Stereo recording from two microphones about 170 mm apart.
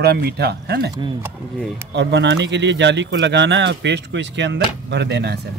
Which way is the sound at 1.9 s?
90° right.